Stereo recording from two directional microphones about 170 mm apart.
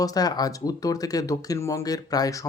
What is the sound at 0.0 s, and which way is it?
Speech, 20° left (ahead or behind).